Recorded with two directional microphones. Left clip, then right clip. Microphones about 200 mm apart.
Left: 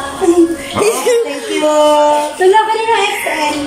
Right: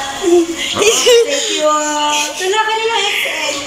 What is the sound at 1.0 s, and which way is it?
Speech, 5° left (ahead or behind).